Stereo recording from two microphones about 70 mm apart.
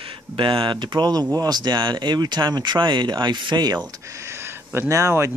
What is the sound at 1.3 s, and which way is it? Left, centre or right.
Speech, right.